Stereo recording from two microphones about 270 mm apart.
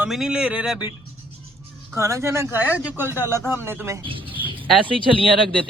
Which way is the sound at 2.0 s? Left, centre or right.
Centre.